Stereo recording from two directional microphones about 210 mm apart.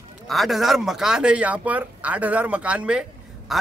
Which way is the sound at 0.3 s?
Centre (ahead or behind).